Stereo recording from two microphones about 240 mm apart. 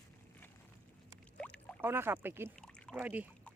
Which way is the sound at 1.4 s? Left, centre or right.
Centre.